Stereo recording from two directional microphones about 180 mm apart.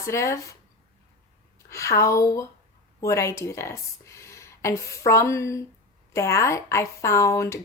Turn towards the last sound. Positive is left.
turn(degrees=15)  # may be behind; listen again after turning